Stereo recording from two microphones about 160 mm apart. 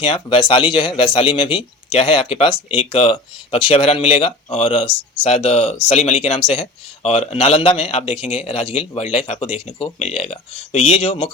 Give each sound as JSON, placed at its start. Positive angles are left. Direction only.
{"t": 0.0, "sound": "a man's voice", "side_deg": 35}